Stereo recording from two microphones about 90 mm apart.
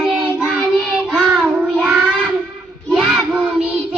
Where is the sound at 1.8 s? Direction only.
10° right (ahead or behind).